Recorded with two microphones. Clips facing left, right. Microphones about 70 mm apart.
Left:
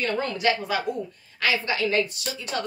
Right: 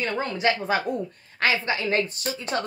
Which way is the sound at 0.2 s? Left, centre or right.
Right.